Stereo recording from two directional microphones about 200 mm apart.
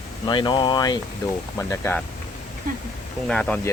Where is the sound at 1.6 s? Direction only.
10° left (ahead or behind).